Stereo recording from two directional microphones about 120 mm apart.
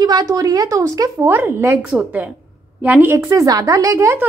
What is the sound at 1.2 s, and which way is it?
A woman's voice, 15° right (ahead or behind).